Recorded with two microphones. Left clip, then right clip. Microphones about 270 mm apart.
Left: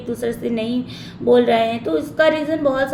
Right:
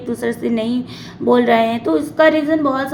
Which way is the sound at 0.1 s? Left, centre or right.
Centre.